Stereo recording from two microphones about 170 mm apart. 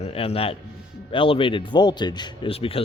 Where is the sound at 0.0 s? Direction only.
35° left (ahead or behind).